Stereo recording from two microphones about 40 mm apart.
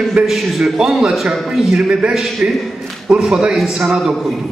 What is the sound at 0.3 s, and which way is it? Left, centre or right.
A man's voice, centre.